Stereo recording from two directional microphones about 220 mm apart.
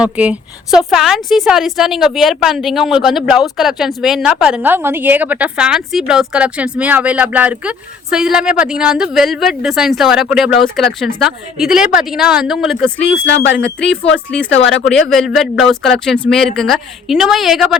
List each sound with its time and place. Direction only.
0.0 s a woman's voice: 5° right (ahead or behind)
14.5 s speech: 55° left (ahead or behind)
14.8 s a woman's voice: centre (ahead or behind)